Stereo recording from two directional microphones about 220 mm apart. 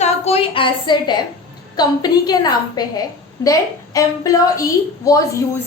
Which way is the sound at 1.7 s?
20° left (ahead or behind).